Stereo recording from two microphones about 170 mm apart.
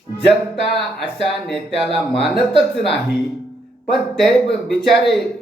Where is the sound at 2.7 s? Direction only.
85° left.